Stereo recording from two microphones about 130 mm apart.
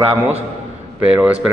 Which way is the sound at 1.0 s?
10° right (ahead or behind).